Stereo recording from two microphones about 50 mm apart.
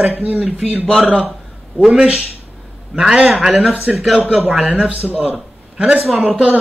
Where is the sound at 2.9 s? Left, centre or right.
Centre.